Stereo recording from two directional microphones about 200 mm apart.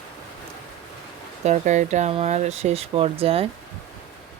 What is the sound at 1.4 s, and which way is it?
Speech, 35° right (ahead or behind).